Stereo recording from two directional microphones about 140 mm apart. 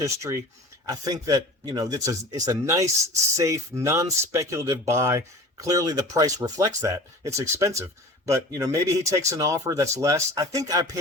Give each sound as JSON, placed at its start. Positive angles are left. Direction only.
{"t": 0.0, "sound": "speech", "side_deg": -20}